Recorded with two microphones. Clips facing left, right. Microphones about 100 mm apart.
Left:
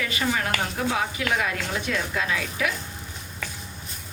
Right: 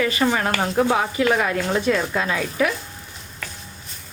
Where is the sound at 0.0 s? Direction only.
40° right (ahead or behind).